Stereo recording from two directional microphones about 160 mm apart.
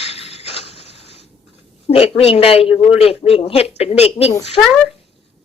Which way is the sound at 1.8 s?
40° left (ahead or behind).